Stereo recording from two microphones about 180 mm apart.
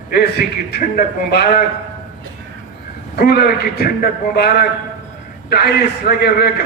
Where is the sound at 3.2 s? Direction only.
60° left (ahead or behind).